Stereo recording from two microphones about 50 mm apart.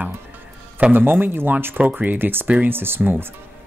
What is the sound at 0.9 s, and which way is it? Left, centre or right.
Speech, right.